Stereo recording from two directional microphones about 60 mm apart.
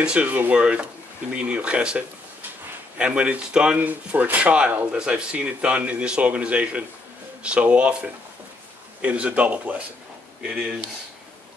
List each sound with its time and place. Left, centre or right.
0.0 s speech: centre
10.5 s speech: centre